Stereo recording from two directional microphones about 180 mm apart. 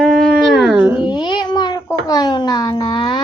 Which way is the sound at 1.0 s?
25° left (ahead or behind).